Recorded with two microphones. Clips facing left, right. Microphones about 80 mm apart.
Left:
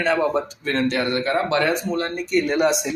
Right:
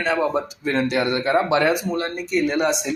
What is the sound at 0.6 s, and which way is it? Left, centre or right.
Speech, centre.